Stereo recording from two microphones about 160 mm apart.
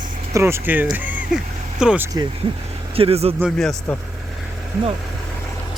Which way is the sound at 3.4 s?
Centre (ahead or behind).